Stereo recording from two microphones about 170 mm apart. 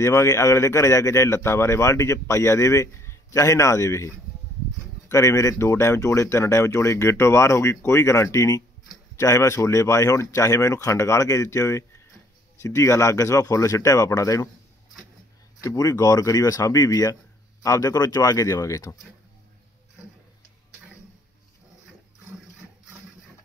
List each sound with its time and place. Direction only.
0.0 s speech: 15° left (ahead or behind)
15.6 s speech: 20° left (ahead or behind)